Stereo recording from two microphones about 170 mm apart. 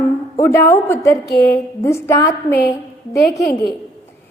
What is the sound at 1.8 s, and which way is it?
Speech, 15° left (ahead or behind).